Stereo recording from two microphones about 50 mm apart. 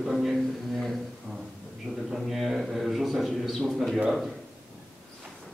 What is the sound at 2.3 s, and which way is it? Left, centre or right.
A man's voice, centre.